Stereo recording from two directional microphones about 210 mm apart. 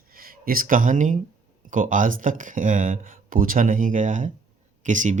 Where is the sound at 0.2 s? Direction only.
45° right (ahead or behind).